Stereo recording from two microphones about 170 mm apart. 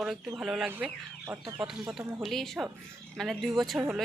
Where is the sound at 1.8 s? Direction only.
15° right (ahead or behind).